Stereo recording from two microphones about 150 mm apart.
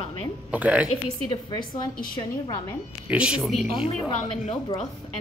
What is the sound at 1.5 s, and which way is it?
Speech, 30° left (ahead or behind).